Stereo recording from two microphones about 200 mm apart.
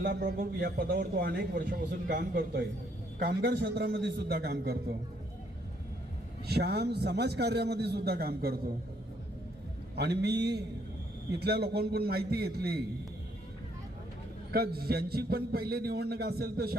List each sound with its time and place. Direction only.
0.0 s a man's voice: 50° right (ahead or behind)
3.2 s a man's voice: 55° right (ahead or behind)
6.5 s a man's voice: 55° right (ahead or behind)
9.9 s a man's voice: 55° right (ahead or behind)
14.5 s a man's voice: 50° right (ahead or behind)